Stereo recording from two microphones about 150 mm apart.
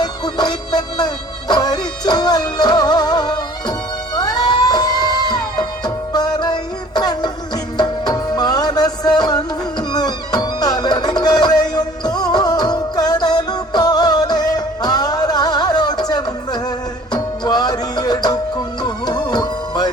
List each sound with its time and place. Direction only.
0.0 s music: 25° left (ahead or behind)